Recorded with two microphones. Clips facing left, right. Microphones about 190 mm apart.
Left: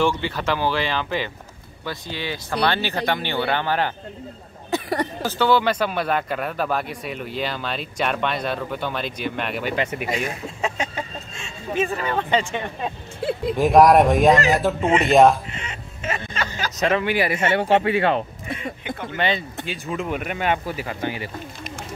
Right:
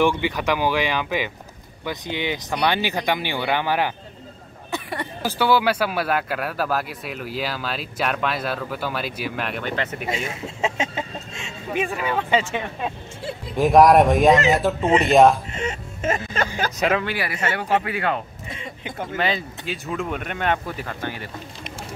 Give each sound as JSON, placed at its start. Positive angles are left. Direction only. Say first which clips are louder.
{"t": 0.0, "sound": "speech", "louder": "right 2 dB", "side_deg": -15}
{"t": 4.6, "sound": "a sound", "louder": "left 6 dB", "side_deg": 40}
{"t": 5.2, "sound": "a man's voice", "louder": "right 1 dB", "side_deg": -10}
{"t": 10.0, "sound": "a man's voice", "louder": "left 1 dB", "side_deg": -25}
{"t": 15.5, "sound": "music", "louder": "right 7 dB", "side_deg": -45}
{"t": 17.0, "sound": "speech", "louder": "left 5 dB", "side_deg": 20}
{"t": 19.1, "sound": "a man's voice", "louder": "left 1 dB", "side_deg": 0}